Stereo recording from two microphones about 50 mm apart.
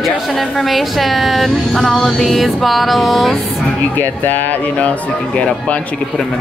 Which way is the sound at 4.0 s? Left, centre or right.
Left.